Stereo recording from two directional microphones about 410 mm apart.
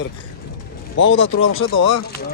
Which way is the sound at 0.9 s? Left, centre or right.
Left.